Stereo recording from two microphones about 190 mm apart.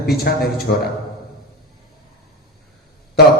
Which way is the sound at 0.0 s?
55° left (ahead or behind).